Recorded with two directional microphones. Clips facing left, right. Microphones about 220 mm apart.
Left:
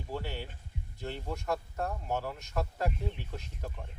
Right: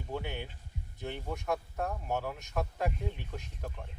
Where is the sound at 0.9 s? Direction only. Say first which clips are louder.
Even; centre (ahead or behind).